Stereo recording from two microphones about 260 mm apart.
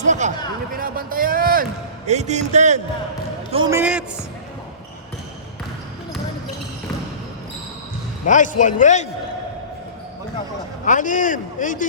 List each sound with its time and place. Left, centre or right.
0.0 s a man's voice: right
3.5 s a man's voice: centre
8.3 s a man's voice: left
10.8 s a man's voice: left